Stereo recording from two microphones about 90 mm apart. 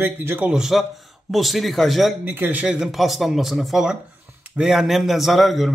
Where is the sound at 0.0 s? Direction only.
20° right (ahead or behind).